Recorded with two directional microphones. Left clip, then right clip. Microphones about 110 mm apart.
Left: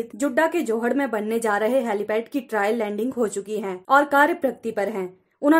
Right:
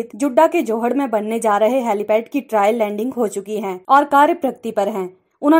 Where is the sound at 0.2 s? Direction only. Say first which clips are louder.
Right 7 dB; 20° right (ahead or behind).